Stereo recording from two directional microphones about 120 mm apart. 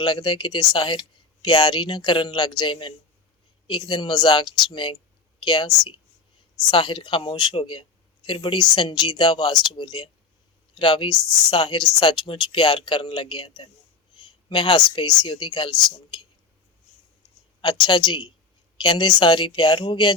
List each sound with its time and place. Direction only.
0.0 s a woman's voice: 40° left (ahead or behind)
17.6 s speech: 40° left (ahead or behind)